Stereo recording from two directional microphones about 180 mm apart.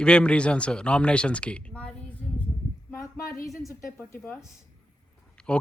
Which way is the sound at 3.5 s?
15° left (ahead or behind).